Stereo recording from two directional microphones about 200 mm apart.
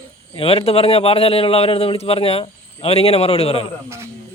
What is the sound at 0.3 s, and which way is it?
A man's voice, 30° left (ahead or behind).